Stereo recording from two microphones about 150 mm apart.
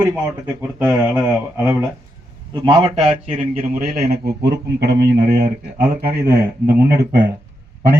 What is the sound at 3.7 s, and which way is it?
A man's voice, 80° right.